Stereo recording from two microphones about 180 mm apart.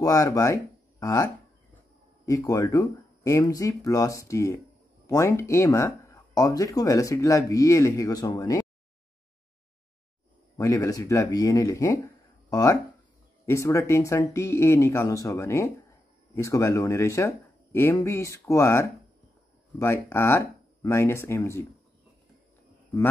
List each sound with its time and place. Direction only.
0.0 s speech: 20° left (ahead or behind)
10.6 s speech: 15° left (ahead or behind)